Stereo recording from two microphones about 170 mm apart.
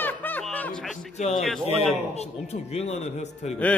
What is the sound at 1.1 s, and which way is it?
Speech, 40° left (ahead or behind).